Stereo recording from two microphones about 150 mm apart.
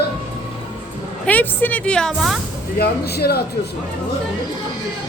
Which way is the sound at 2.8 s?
90° left.